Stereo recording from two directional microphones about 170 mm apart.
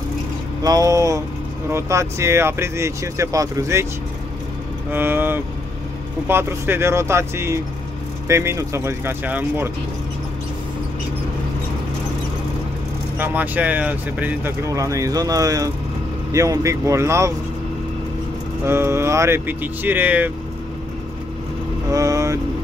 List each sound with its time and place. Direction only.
0.7 s speech: 20° right (ahead or behind)
4.9 s speech: 10° right (ahead or behind)
13.2 s speech: 10° right (ahead or behind)
18.7 s speech: 15° right (ahead or behind)
21.9 s vehicle: 20° right (ahead or behind)